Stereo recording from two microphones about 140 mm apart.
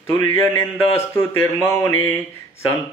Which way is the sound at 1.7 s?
20° left (ahead or behind).